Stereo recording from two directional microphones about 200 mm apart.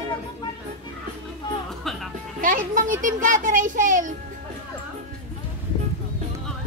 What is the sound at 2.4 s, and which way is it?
Music, 40° right (ahead or behind).